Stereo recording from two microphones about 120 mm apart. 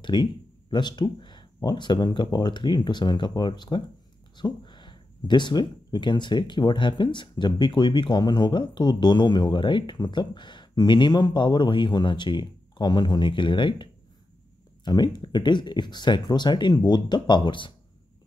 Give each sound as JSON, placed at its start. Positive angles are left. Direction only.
{"t": 0.0, "sound": "speech", "side_deg": 40}
{"t": 14.9, "sound": "speech", "side_deg": 35}